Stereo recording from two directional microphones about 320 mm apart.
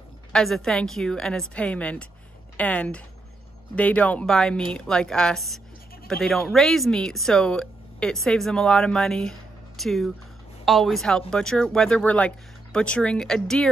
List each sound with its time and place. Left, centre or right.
0.3 s speech: centre